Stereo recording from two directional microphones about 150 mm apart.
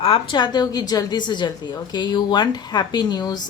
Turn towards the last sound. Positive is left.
turn(degrees=30)  # may be behind; listen again after turning